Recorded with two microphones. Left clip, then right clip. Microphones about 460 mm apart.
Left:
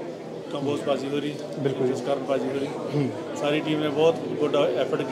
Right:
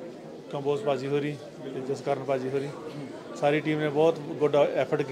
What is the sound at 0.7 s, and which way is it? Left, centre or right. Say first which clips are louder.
Speech: left 1 dB; right.